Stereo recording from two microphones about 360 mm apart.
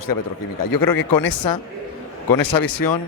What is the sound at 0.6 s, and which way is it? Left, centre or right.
Speech, left.